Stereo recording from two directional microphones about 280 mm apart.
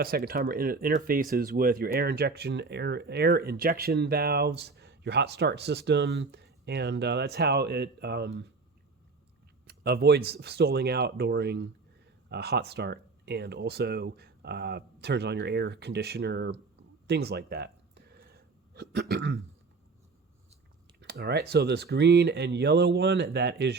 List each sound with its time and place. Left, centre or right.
0.0 s speech: right
9.6 s speech: right
17.1 s a sound: right
21.0 s speech: right